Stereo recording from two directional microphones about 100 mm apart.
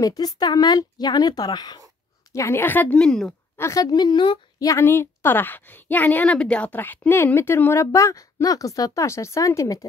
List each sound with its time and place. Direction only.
0.0 s speech: 40° left (ahead or behind)
2.3 s a woman's voice: 25° left (ahead or behind)
3.0 s speech: 5° left (ahead or behind)
3.5 s a woman's voice: 30° left (ahead or behind); by 4.4 s 50° left (ahead or behind)
4.6 s a woman's voice: 35° left (ahead or behind)
4.8 s a woman's voice: 20° left (ahead or behind)